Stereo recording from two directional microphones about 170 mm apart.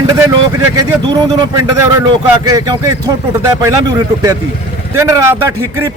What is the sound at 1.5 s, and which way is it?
Speech, 20° right (ahead or behind).